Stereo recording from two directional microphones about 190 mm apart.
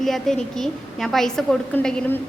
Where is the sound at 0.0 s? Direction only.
Centre (ahead or behind).